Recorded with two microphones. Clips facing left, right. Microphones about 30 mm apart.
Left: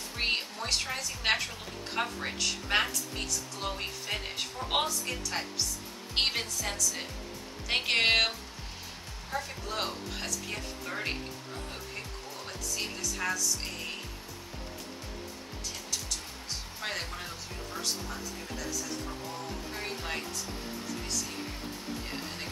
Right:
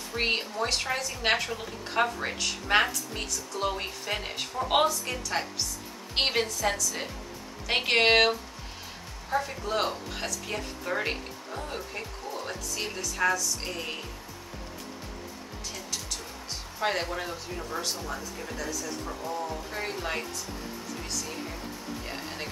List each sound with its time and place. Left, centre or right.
0.1 s speech: centre
12.7 s speech: centre
16.8 s speech: centre
18.6 s speech: centre
19.0 s speech: centre
22.0 s music: centre